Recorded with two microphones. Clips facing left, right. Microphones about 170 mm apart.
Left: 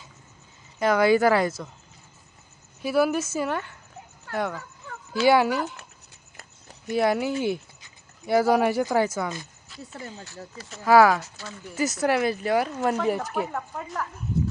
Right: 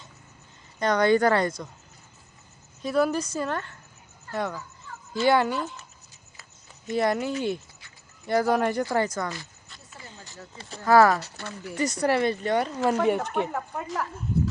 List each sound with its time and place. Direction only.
0.8 s speech: 5° left (ahead or behind)
2.8 s speech: 5° left (ahead or behind)
5.5 s speech: 70° left (ahead or behind)
6.9 s speech: 5° left (ahead or behind)
10.8 s speech: centre (ahead or behind)
11.2 s speech: 65° right (ahead or behind)
11.7 s speech: 5° left (ahead or behind)